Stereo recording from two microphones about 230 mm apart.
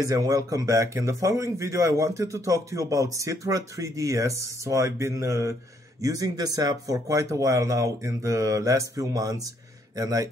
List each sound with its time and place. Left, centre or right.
0.0 s speech: centre